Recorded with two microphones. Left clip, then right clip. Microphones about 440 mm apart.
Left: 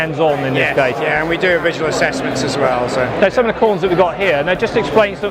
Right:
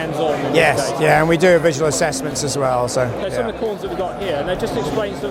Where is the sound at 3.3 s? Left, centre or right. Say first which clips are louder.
Left 8 dB; left.